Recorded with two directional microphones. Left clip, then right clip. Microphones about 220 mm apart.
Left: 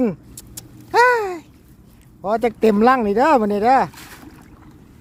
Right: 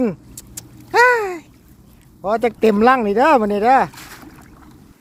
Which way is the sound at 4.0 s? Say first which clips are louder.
Right 2 dB; 25° right (ahead or behind).